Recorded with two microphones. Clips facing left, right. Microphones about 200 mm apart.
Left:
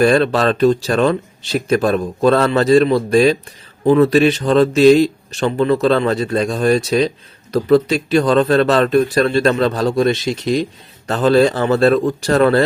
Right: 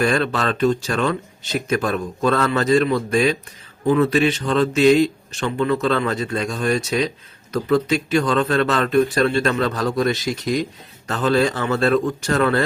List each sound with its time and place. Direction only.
0.0 s speech: 35° left (ahead or behind)